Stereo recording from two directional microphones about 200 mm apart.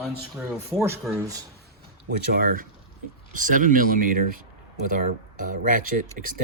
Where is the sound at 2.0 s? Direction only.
45° right (ahead or behind).